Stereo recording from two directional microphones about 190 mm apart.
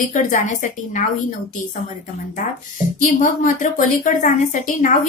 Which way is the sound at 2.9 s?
45° left (ahead or behind).